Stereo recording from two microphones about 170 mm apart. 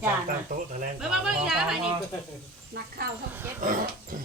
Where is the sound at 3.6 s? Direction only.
55° right (ahead or behind).